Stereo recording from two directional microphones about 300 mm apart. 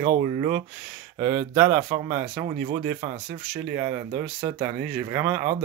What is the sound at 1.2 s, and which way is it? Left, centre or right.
Speech, right.